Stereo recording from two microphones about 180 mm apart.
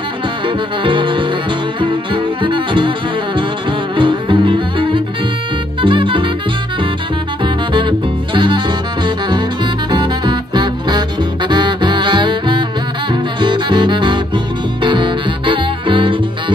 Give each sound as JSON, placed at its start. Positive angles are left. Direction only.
{"t": 0.8, "sound": "music", "side_deg": -25}
{"t": 3.9, "sound": "music", "side_deg": -25}
{"t": 7.4, "sound": "music", "side_deg": -25}
{"t": 8.4, "sound": "saxophone", "side_deg": -25}
{"t": 9.8, "sound": "music", "side_deg": -25}